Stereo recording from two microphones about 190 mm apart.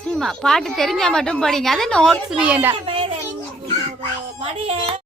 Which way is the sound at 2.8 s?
30° right (ahead or behind).